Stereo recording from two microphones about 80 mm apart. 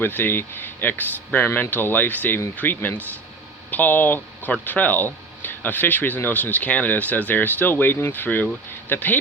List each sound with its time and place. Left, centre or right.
0.0 s speech: left